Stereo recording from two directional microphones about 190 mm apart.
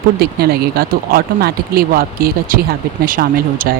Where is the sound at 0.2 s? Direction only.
55° right (ahead or behind).